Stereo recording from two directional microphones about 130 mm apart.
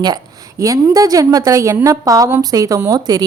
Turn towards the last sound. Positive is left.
turn(degrees=-30)  # may be behind; listen again after turning